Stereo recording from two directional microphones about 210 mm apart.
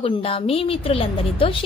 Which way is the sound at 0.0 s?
25° left (ahead or behind).